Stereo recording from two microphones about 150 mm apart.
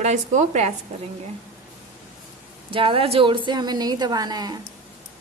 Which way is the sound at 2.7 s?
35° right (ahead or behind).